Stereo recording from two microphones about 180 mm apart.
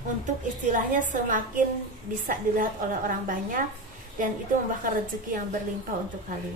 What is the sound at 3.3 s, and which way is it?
Speech, 50° right (ahead or behind).